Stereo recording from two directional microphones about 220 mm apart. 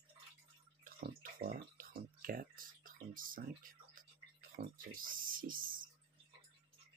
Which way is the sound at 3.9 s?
40° right (ahead or behind).